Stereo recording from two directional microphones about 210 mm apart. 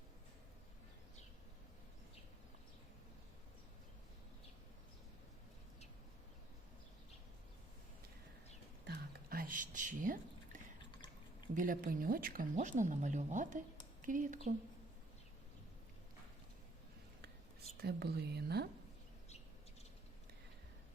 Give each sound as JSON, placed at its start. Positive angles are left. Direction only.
{"t": 8.9, "sound": "a sound", "side_deg": -45}
{"t": 11.5, "sound": "speech", "side_deg": -40}
{"t": 17.8, "sound": "speech", "side_deg": -50}